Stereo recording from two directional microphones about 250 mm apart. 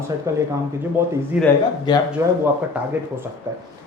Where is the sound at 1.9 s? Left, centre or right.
Centre.